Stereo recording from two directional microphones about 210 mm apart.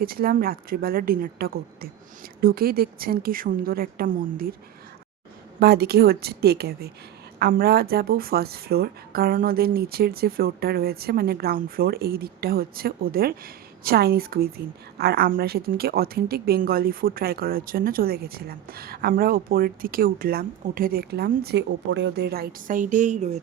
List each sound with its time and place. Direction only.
0.0 s speech: 45° right (ahead or behind)
5.5 s speech: 50° right (ahead or behind)